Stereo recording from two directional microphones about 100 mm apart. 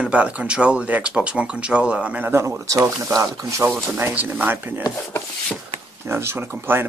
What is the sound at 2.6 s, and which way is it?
Speech, 30° right (ahead or behind).